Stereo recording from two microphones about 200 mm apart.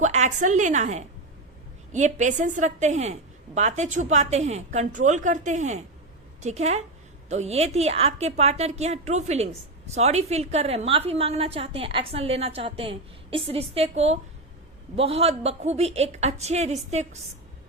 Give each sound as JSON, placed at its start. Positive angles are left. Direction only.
{"t": 0.0, "sound": "a woman's voice", "side_deg": -35}